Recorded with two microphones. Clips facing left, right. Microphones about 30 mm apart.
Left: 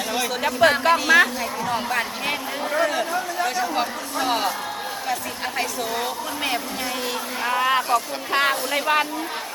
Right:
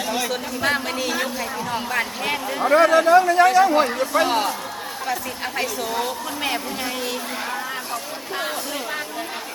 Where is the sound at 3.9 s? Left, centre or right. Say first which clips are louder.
Right 6 dB; right.